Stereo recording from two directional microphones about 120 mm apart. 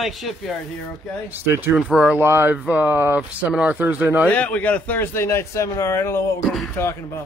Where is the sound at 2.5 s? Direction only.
10° right (ahead or behind).